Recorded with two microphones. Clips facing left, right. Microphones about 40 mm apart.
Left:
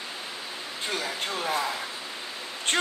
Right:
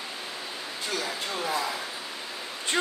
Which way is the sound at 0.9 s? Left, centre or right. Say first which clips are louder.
Left 1 dB; left.